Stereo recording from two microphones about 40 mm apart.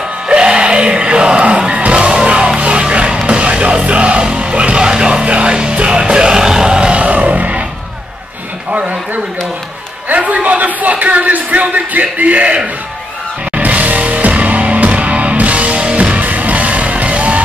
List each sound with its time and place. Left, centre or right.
0.3 s music: right
8.7 s a sound: right
10.0 s speech: right
13.6 s music: right
16.2 s music: right